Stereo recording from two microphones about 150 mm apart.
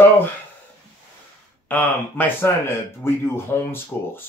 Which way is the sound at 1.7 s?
10° left (ahead or behind).